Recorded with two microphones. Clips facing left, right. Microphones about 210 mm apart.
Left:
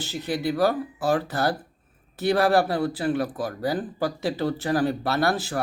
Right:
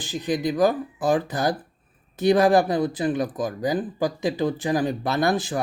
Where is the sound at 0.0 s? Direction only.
15° right (ahead or behind).